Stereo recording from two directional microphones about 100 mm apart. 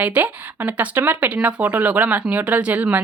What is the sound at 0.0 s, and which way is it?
A woman's voice, 15° right (ahead or behind).